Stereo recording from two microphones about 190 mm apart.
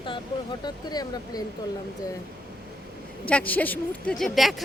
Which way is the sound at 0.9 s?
20° left (ahead or behind).